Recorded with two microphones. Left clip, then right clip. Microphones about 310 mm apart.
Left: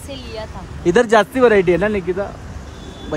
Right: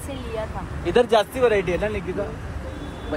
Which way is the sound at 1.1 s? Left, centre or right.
Left.